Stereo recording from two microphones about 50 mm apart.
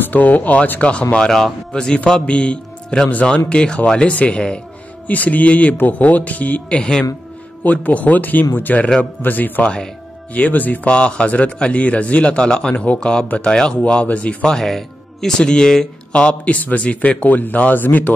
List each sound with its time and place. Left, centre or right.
0.0 s speech: left
1.3 s a man's voice: centre
5.0 s speech: left
10.9 s speech: left
14.5 s speech: centre; by 18.1 s left